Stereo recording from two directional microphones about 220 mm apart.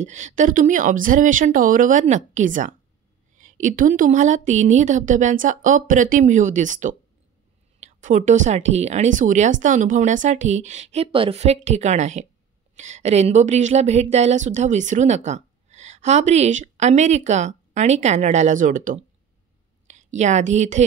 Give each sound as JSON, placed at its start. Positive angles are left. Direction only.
{"t": 0.0, "sound": "a woman's voice", "side_deg": -35}